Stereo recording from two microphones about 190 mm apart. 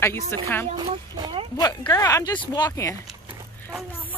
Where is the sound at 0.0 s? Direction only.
10° left (ahead or behind).